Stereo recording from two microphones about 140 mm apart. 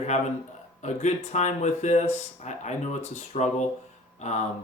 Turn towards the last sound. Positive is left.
turn(degrees=50)  # may be behind; listen again after turning